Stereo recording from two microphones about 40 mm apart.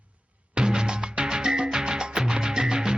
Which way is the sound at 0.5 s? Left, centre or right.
Centre.